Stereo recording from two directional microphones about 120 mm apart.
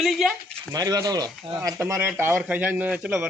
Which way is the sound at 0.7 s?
30° right (ahead or behind).